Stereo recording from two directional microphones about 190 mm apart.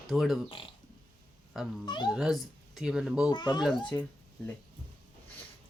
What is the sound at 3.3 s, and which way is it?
Speech, 20° left (ahead or behind).